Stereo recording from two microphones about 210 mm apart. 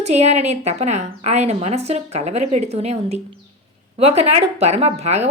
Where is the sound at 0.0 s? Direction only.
30° right (ahead or behind).